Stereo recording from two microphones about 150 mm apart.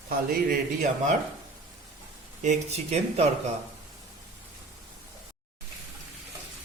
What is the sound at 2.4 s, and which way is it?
Speech, 50° right (ahead or behind).